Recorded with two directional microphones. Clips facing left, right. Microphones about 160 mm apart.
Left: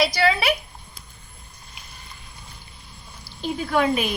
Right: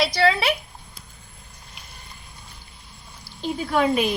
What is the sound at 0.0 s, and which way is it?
Speech, 25° right (ahead or behind).